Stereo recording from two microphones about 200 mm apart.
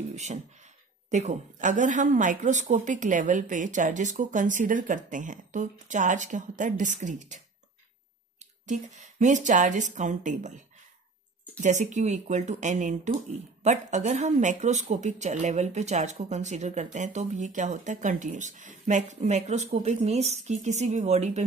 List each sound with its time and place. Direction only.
0.1 s speech: 35° right (ahead or behind)
11.6 s speech: 35° right (ahead or behind)